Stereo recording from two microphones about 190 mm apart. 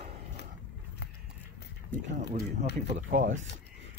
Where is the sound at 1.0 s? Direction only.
60° left (ahead or behind).